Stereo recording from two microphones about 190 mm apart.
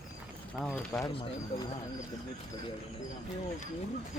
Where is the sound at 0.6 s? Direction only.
5° left (ahead or behind).